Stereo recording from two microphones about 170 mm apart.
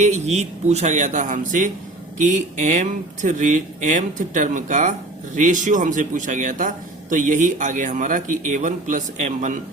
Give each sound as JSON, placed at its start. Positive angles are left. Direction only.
{"t": 0.0, "sound": "speech", "side_deg": -40}